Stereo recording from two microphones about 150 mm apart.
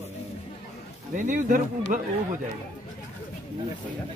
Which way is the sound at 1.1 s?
65° right (ahead or behind).